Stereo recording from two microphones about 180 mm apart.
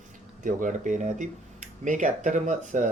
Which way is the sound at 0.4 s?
45° right (ahead or behind).